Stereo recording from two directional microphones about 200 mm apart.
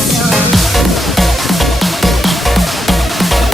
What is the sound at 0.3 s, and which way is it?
Music, centre (ahead or behind).